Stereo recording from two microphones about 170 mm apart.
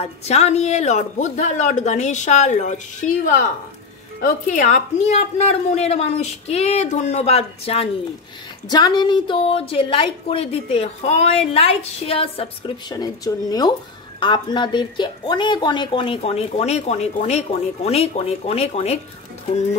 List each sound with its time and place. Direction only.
0.0 s speech: 40° left (ahead or behind)
4.5 s a woman's voice: 50° left (ahead or behind)
8.6 s a woman's voice: 25° left (ahead or behind)